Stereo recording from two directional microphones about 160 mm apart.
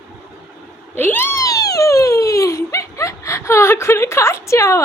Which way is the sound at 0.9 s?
15° left (ahead or behind).